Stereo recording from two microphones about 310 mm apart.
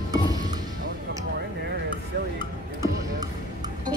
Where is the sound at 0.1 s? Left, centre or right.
Centre.